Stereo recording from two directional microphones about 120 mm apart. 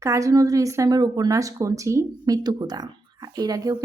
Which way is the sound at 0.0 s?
25° right (ahead or behind).